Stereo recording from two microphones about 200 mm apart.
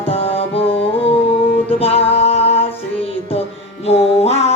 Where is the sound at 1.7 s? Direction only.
30° left (ahead or behind).